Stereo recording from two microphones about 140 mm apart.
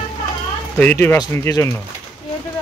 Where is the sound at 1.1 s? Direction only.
20° left (ahead or behind).